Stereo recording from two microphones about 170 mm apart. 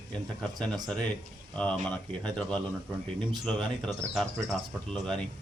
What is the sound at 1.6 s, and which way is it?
Speech, 5° left (ahead or behind).